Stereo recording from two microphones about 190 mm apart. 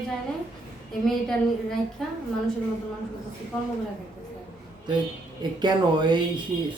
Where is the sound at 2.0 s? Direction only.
Centre (ahead or behind).